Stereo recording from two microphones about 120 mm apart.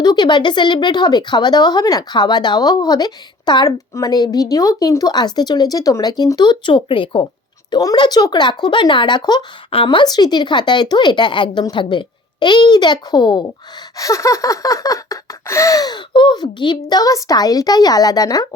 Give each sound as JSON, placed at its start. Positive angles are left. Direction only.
{"t": 0.0, "sound": "gasp", "side_deg": 35}
{"t": 7.7, "sound": "gasp", "side_deg": 35}
{"t": 13.9, "sound": "gasp", "side_deg": 25}